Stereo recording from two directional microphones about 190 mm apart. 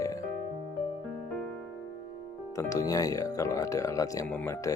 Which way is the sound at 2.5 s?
15° left (ahead or behind).